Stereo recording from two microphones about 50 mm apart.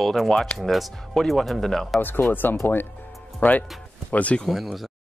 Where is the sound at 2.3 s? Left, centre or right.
Left.